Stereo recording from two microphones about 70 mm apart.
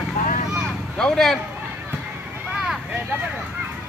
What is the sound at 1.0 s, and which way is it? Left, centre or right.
Speech, centre.